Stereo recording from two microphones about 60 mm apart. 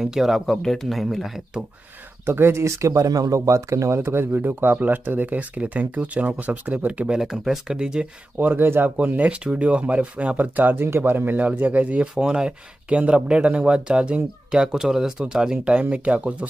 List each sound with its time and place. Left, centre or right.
0.0 s speech: centre
0.6 s speech: centre
2.2 s speech: right
3.3 s speech: right
4.0 s speech: right
7.2 s speech: centre
8.4 s speech: right
8.9 s speech: right